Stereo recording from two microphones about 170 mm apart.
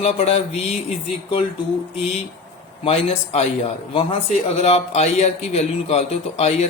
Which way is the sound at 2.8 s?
35° left (ahead or behind).